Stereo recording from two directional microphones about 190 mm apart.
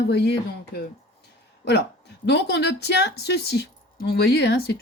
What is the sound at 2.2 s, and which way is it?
A woman's voice, 60° left (ahead or behind).